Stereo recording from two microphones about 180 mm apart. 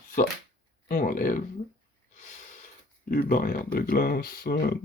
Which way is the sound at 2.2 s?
45° left (ahead or behind).